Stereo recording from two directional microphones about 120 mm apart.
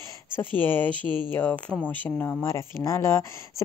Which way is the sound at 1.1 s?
40° right (ahead or behind).